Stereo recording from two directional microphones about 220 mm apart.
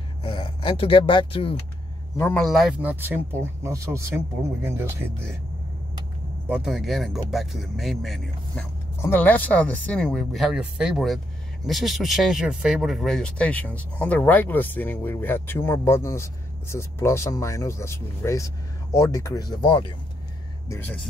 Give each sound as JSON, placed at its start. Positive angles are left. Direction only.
{"t": 0.2, "sound": "speech", "side_deg": 25}
{"t": 2.1, "sound": "speech", "side_deg": 10}
{"t": 2.4, "sound": "speech", "side_deg": 0}
{"t": 6.5, "sound": "speech", "side_deg": 0}